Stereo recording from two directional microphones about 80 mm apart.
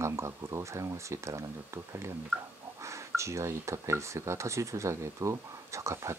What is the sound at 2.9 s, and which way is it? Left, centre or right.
Speech, right.